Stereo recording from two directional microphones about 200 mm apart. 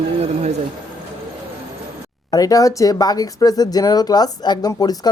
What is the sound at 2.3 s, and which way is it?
Speech, 15° left (ahead or behind).